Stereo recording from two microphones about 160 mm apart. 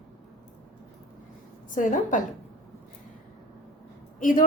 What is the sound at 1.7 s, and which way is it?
Speech, 55° left (ahead or behind).